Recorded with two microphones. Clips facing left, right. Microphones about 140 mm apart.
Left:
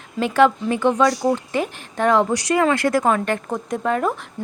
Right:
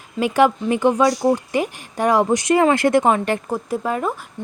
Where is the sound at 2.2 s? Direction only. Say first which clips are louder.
Right 3 dB; 20° right (ahead or behind).